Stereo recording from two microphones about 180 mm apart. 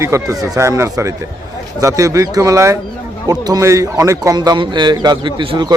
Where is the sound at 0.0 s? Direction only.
15° right (ahead or behind).